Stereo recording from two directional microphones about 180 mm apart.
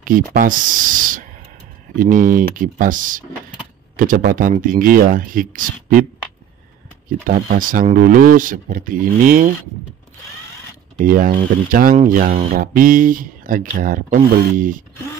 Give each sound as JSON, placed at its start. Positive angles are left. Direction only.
{"t": 0.0, "sound": "speech", "side_deg": -50}
{"t": 7.2, "sound": "speech", "side_deg": -50}
{"t": 11.0, "sound": "speech", "side_deg": -50}